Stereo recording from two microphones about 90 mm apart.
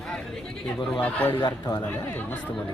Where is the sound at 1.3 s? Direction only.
60° left (ahead or behind).